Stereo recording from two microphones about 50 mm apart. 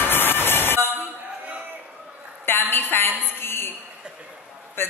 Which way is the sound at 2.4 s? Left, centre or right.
Left.